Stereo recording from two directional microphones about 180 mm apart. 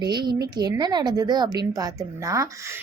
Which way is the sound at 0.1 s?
25° right (ahead or behind).